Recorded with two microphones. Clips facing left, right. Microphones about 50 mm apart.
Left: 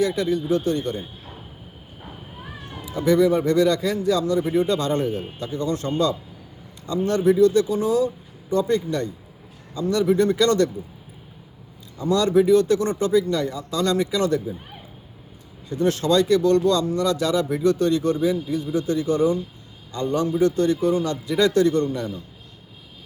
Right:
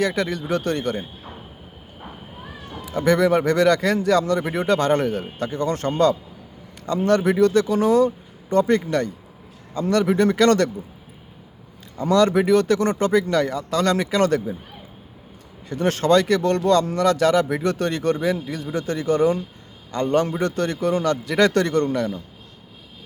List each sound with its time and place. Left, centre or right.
0.0 s a man's voice: right
2.5 s cat: centre
2.8 s a man's voice: right
5.4 s speech: right
7.3 s speech: right
12.0 s speech: right
15.7 s speech: right